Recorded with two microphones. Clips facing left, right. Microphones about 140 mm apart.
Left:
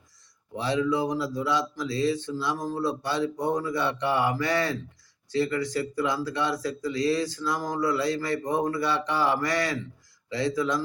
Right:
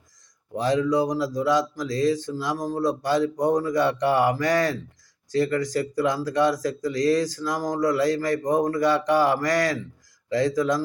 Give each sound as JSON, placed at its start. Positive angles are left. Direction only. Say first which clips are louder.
{"t": 0.5, "sound": "speech", "louder": "right 4 dB", "side_deg": -45}